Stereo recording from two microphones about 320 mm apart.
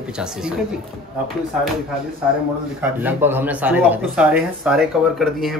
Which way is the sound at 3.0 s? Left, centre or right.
Centre.